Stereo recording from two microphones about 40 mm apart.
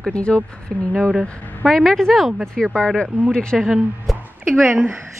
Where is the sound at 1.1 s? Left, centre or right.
Right.